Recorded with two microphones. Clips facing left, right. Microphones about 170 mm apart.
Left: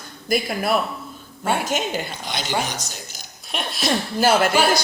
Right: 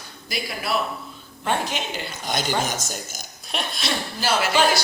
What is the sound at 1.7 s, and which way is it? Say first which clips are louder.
Speech: left 6 dB; 45° left (ahead or behind).